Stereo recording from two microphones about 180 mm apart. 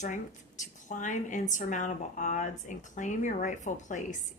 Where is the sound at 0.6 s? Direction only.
45° left (ahead or behind).